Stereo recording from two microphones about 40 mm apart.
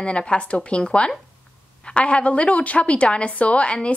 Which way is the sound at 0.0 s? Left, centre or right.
Left.